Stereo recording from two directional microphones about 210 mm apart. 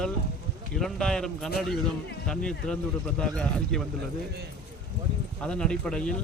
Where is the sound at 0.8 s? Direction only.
5° left (ahead or behind).